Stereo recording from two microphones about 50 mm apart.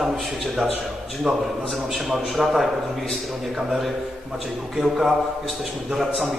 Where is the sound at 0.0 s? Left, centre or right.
Centre.